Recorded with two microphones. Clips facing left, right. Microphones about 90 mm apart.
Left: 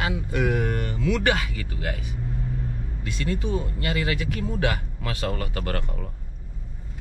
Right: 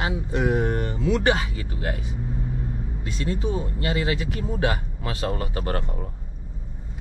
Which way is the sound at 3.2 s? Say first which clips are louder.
Even; 25° right (ahead or behind).